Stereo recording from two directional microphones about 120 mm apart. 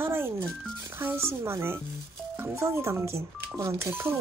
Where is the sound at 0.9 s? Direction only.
20° right (ahead or behind).